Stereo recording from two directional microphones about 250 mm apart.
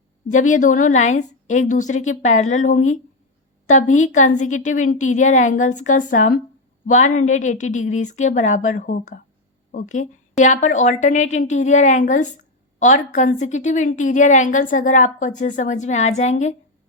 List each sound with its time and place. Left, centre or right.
0.3 s a woman's voice: left